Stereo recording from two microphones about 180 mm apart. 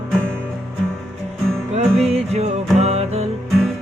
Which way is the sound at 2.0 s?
35° right (ahead or behind).